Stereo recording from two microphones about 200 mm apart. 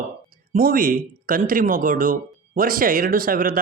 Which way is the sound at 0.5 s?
45° right (ahead or behind).